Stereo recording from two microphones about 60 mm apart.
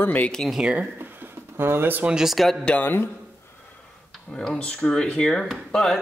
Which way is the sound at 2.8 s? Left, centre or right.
Left.